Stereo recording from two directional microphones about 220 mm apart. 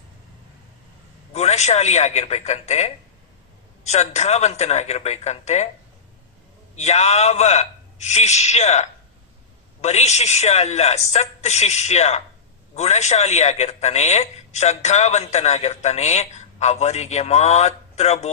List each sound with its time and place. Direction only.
1.3 s a man's voice: 30° left (ahead or behind)
6.7 s a man's voice: 30° left (ahead or behind)